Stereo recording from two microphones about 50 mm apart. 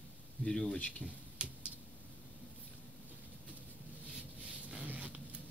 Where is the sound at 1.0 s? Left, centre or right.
Left.